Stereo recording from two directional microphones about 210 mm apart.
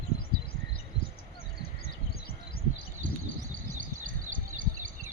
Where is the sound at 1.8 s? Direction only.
45° left (ahead or behind).